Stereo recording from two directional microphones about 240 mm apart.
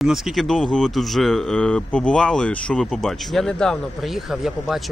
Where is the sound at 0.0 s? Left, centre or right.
Centre.